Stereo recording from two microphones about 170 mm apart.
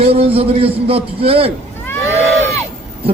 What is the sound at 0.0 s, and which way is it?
A man's voice, 35° right (ahead or behind).